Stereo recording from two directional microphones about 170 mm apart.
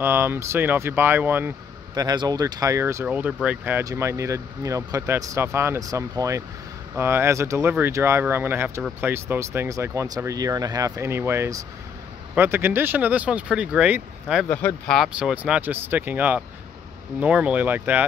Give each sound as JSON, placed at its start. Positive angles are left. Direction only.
{"t": 0.0, "sound": "speech", "side_deg": -15}
{"t": 2.0, "sound": "speech", "side_deg": -25}
{"t": 14.5, "sound": "speech", "side_deg": 10}